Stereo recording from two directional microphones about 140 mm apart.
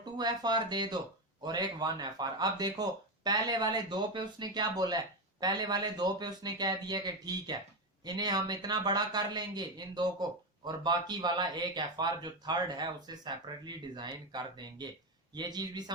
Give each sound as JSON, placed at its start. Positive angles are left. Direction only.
{"t": 0.0, "sound": "speech", "side_deg": -30}